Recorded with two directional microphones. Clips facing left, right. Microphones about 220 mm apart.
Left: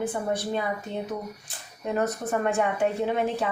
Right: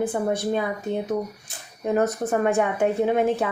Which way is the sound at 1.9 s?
45° right (ahead or behind).